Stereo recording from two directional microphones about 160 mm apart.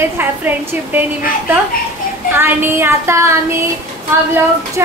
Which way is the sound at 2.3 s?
15° right (ahead or behind).